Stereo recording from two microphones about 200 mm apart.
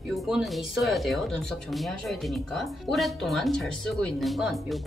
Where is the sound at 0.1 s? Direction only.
Centre (ahead or behind).